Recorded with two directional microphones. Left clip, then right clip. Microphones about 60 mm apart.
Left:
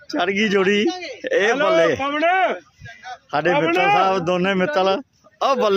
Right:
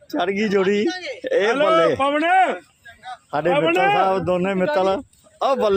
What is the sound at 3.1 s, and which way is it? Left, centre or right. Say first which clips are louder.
A man's voice: left 1 dB; centre.